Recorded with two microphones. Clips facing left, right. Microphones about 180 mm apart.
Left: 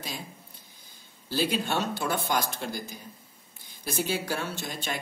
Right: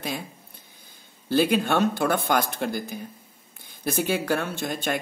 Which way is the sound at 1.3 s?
55° right (ahead or behind).